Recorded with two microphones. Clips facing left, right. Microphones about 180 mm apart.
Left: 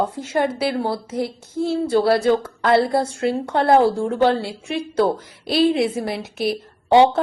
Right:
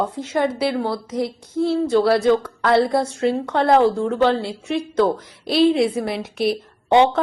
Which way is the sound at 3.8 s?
10° left (ahead or behind).